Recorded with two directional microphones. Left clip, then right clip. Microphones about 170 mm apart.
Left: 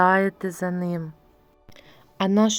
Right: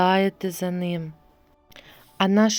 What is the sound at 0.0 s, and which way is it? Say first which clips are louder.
Speech: left 1 dB; 20° right (ahead or behind).